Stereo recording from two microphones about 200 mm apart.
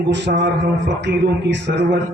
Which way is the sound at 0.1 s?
60° right (ahead or behind).